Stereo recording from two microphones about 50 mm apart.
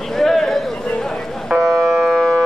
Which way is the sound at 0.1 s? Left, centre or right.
Centre.